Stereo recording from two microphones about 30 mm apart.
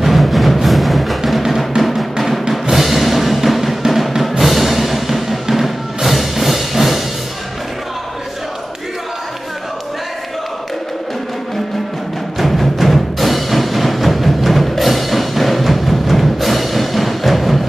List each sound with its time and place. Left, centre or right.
0.0 s music: centre
12.4 s music: centre